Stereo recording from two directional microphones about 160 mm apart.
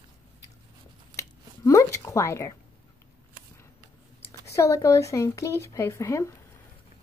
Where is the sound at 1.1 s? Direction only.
20° left (ahead or behind).